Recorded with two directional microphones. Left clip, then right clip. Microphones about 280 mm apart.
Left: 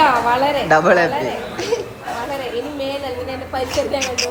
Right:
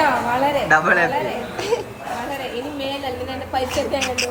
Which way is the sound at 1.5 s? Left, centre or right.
Centre.